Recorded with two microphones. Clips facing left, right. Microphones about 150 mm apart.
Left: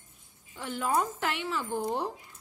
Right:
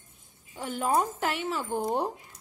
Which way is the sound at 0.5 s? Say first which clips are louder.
Right 2 dB; 40° right (ahead or behind).